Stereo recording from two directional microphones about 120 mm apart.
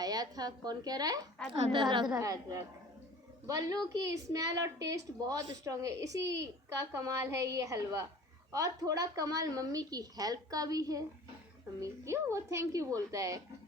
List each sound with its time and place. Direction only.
0.0 s a woman's voice: 30° right (ahead or behind)
2.1 s a woman's voice: 25° right (ahead or behind)